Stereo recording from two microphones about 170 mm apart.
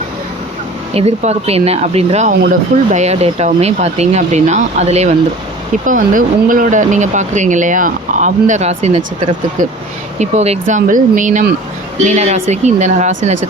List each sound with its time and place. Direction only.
0.9 s speech: 40° right (ahead or behind)
5.8 s speech: 50° right (ahead or behind)